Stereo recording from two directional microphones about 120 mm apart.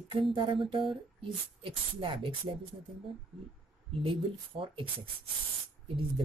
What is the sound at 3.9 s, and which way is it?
Speech, 45° right (ahead or behind).